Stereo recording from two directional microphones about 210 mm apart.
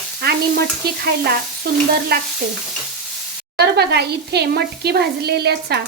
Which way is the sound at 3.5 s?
50° right (ahead or behind).